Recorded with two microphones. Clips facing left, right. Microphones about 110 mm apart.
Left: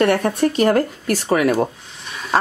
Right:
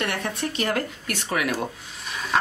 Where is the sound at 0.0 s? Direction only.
45° left (ahead or behind).